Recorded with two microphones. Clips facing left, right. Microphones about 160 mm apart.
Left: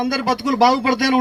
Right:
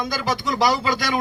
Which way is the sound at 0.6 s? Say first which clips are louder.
Left 5 dB; 55° left (ahead or behind).